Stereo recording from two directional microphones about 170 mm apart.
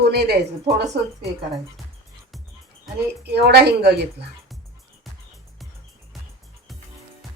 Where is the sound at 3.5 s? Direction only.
75° right (ahead or behind).